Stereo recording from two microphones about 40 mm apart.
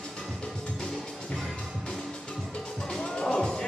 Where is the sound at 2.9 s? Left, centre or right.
Centre.